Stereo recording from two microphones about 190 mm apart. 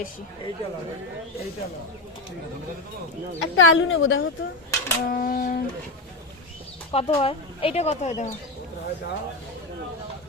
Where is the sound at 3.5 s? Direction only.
90° left.